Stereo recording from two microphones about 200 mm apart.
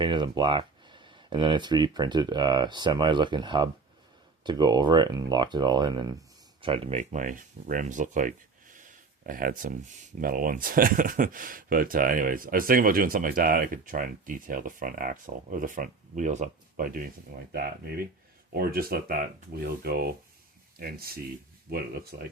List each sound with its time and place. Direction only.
0.0 s speech: 25° right (ahead or behind); by 17.1 s 45° right (ahead or behind)
18.5 s speech: 50° right (ahead or behind)